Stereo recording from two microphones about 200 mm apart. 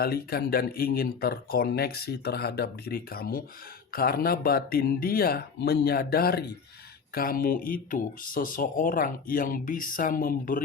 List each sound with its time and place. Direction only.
0.0 s speech: 50° left (ahead or behind)